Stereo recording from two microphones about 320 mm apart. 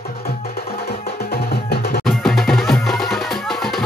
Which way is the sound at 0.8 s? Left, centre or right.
Left.